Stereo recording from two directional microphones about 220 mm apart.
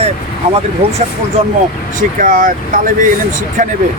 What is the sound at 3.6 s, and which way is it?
Speech, 35° right (ahead or behind).